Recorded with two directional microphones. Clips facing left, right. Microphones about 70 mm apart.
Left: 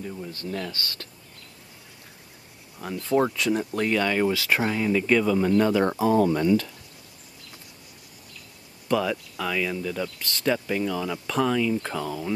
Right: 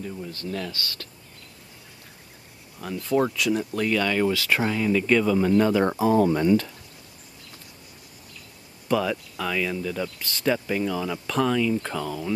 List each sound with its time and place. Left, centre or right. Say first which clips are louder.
0.0 s speech: right 1 dB; centre
0.3 s speech: even; left
2.8 s speech: even; left
5.2 s speech: right 1 dB; centre
6.4 s speech: right 1 dB; right
8.8 s speech: even; centre